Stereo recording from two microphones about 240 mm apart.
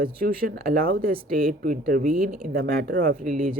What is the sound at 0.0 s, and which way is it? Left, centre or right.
Speech, right.